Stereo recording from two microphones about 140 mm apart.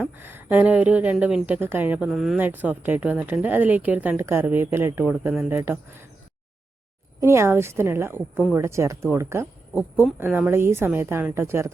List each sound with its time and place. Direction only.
0.0 s speech: 15° right (ahead or behind)
2.0 s speech: centre (ahead or behind)
2.4 s speech: 10° right (ahead or behind)
7.2 s speech: 20° right (ahead or behind)